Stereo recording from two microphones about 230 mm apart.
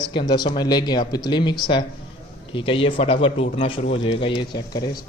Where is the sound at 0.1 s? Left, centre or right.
Centre.